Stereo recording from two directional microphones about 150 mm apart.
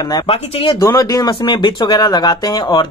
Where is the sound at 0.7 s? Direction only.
20° left (ahead or behind).